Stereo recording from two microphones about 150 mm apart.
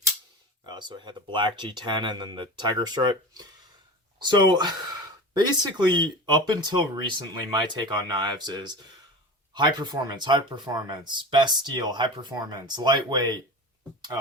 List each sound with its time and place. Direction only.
0.6 s speech: 30° right (ahead or behind)